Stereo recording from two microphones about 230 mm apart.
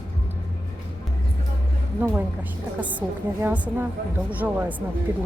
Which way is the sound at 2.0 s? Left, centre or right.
Centre.